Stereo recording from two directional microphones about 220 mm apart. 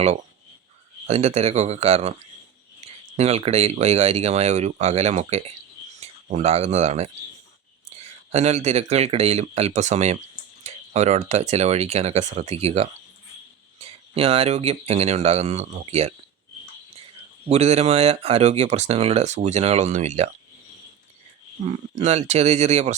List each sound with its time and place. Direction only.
1.0 s speech: 30° right (ahead or behind)
2.8 s a sound: 30° right (ahead or behind)
3.2 s speech: 30° right (ahead or behind)
17.5 s speech: 30° right (ahead or behind)
21.7 s speech: 30° right (ahead or behind)